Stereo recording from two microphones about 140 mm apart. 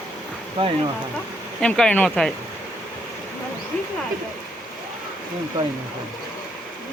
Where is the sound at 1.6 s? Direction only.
5° left (ahead or behind).